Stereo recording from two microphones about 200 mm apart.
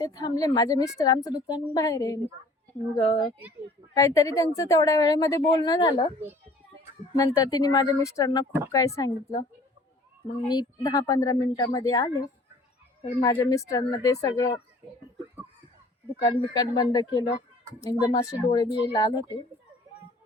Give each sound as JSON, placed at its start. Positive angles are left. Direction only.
{"t": 0.0, "sound": "a woman's voice", "side_deg": 20}
{"t": 7.2, "sound": "a woman's voice", "side_deg": 20}
{"t": 13.0, "sound": "speech", "side_deg": 30}
{"t": 13.4, "sound": "a woman's voice", "side_deg": 15}
{"t": 16.2, "sound": "a woman's voice", "side_deg": 20}